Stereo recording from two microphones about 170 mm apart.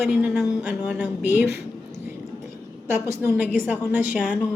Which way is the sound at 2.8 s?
15° right (ahead or behind).